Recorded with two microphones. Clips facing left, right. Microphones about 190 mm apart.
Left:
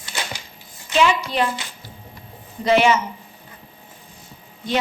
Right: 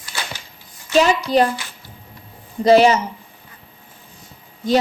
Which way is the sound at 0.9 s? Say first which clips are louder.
Right 4 dB; 40° right (ahead or behind).